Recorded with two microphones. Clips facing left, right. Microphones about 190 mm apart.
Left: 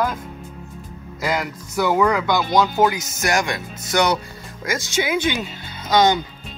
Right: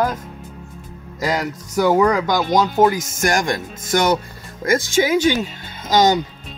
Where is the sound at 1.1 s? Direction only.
40° right (ahead or behind).